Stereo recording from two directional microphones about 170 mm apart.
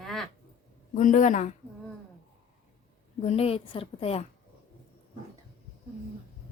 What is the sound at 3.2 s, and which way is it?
Speech, 35° left (ahead or behind).